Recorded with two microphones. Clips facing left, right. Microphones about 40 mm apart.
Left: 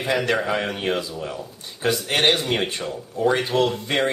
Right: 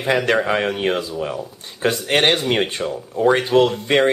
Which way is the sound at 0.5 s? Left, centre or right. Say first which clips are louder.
Right 4 dB; right.